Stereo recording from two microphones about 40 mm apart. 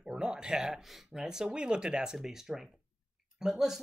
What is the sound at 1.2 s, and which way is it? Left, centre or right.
Speech, centre.